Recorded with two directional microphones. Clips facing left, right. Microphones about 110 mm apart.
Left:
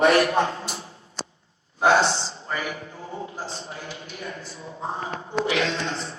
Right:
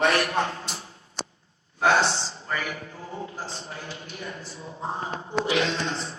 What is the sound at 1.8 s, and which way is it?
A man's voice, 25° left (ahead or behind).